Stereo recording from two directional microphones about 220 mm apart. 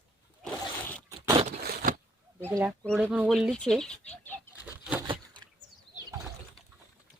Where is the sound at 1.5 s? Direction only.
40° right (ahead or behind).